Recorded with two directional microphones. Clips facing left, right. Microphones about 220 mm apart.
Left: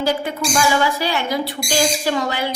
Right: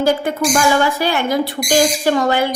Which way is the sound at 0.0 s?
50° right (ahead or behind).